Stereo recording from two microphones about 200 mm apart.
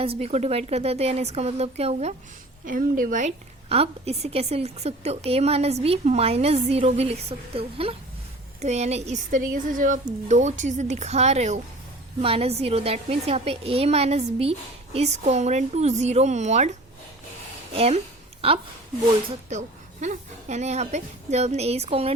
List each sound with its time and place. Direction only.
0.0 s a woman's voice: 30° right (ahead or behind)
2.6 s a woman's voice: 45° right (ahead or behind)
17.7 s a woman's voice: 30° right (ahead or behind)